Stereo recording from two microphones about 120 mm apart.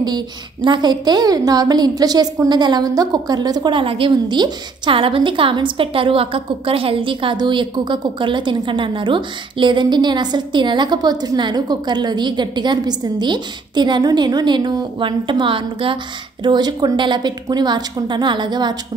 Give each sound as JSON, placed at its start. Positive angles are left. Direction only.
{"t": 0.0, "sound": "a woman's voice", "side_deg": -40}